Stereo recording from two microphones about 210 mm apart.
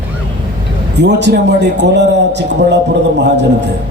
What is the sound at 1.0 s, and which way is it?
A man's voice, 55° right (ahead or behind).